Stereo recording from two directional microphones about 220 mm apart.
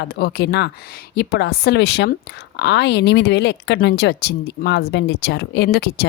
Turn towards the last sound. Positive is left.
turn(degrees=50)  # may be behind; listen again after turning